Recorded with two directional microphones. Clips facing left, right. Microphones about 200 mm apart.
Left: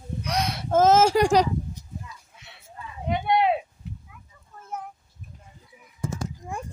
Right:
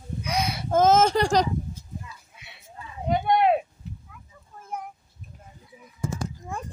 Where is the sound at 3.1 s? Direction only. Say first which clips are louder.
Right 1 dB; 50° right (ahead or behind).